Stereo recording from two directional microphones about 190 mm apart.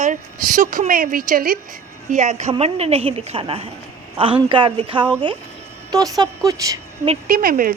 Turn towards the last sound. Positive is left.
turn(degrees=-50)  # may be behind; listen again after turning